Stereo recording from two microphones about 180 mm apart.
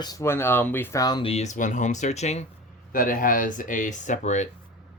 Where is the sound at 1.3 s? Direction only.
40° left (ahead or behind).